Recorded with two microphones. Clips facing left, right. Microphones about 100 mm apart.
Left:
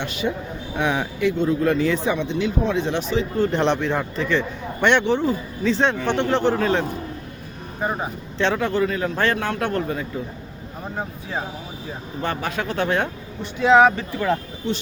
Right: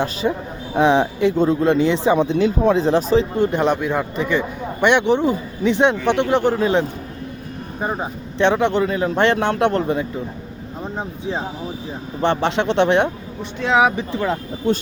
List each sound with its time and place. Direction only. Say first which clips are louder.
0.0 s a man's voice: right 4 dB; 35° right (ahead or behind)
2.1 s a man's voice: right 6 dB; 45° right (ahead or behind)
3.3 s a man's voice: right 2 dB; 15° right (ahead or behind)
8.4 s speech: right 4 dB; 20° right (ahead or behind)
13.4 s speech: left 2 dB; centre (ahead or behind)
13.9 s a man's voice: right 1 dB; 15° right (ahead or behind)